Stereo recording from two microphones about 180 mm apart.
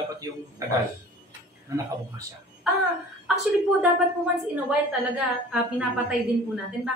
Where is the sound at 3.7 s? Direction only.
5° right (ahead or behind).